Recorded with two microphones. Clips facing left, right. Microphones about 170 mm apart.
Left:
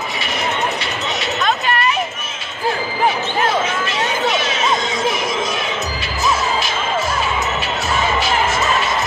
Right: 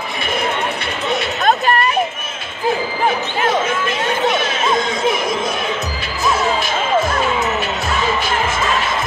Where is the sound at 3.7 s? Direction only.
55° right (ahead or behind).